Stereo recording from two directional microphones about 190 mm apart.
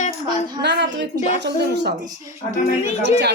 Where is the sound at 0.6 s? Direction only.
65° right (ahead or behind).